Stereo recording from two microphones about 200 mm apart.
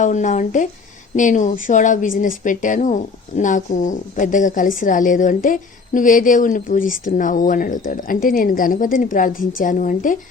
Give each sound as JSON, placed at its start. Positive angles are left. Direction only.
{"t": 0.0, "sound": "speech", "side_deg": 40}